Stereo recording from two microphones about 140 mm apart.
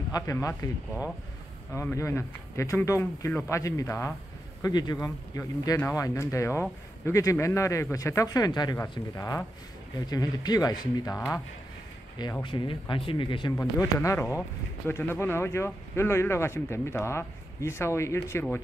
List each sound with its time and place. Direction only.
0.1 s speech: 25° left (ahead or behind)
1.7 s speech: 15° left (ahead or behind)
12.2 s speech: 30° left (ahead or behind)
13.6 s speech: 20° left (ahead or behind)